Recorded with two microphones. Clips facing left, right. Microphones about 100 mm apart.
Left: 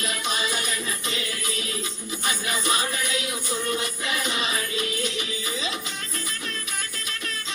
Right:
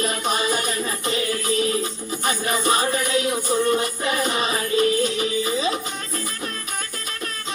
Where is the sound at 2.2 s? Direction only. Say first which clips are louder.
Right 6 dB; 40° right (ahead or behind).